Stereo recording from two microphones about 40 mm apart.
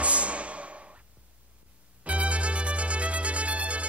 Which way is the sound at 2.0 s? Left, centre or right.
Right.